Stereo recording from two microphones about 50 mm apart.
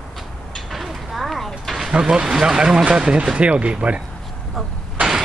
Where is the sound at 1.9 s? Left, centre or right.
Centre.